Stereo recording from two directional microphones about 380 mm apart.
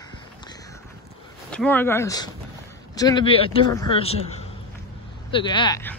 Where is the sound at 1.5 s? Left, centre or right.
Centre.